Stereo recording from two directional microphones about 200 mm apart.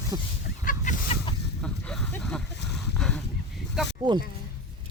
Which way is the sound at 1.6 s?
5° left (ahead or behind).